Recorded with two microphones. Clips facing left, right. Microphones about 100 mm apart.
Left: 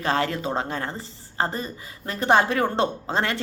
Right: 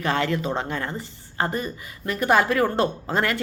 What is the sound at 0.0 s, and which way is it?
A woman's voice, 35° left (ahead or behind).